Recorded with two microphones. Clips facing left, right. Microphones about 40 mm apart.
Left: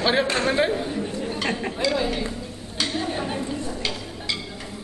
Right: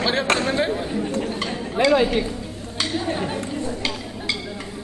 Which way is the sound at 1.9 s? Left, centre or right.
Right.